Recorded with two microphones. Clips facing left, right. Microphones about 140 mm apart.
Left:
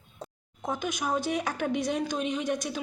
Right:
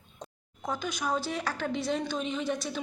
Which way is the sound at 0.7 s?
15° left (ahead or behind).